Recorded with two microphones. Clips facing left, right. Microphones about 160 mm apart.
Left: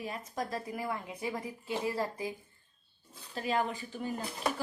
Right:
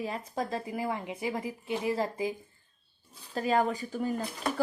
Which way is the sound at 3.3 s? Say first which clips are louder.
Right 5 dB; 40° right (ahead or behind).